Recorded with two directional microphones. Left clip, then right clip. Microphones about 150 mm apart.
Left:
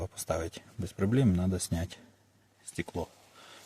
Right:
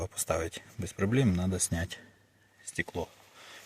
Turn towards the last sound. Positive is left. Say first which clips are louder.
# right 2 dB
turn(degrees=30)  # may be behind; listen again after turning